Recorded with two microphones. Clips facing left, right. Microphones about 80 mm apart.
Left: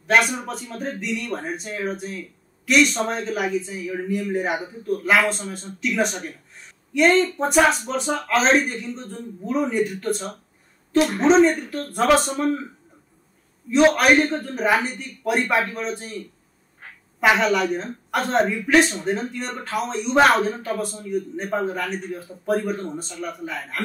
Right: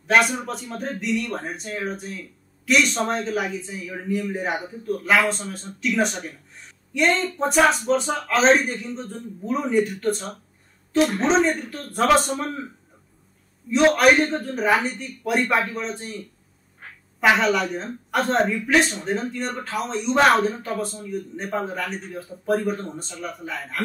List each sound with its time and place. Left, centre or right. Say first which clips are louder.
0.0 s a man's voice: even; centre
13.7 s a man's voice: even; centre
17.2 s a man's voice: left 1 dB; centre